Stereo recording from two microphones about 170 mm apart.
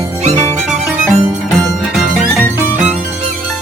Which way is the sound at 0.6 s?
Centre (ahead or behind).